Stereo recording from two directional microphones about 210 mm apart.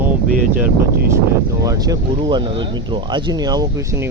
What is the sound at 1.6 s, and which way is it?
Speech, 15° right (ahead or behind).